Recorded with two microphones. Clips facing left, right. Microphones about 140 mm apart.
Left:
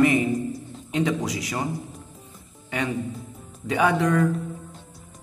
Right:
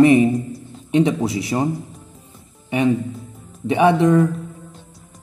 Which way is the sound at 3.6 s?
25° right (ahead or behind).